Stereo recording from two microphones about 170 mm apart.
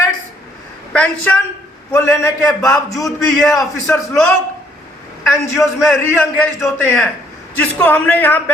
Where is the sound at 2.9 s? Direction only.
20° left (ahead or behind).